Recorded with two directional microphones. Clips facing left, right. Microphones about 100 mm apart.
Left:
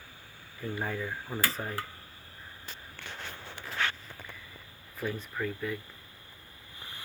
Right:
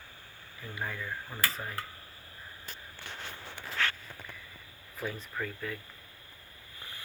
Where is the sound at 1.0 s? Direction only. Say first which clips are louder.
Left 2 dB; 25° left (ahead or behind).